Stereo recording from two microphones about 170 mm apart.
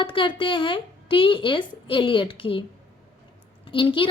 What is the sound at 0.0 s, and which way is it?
A woman's voice, 30° left (ahead or behind).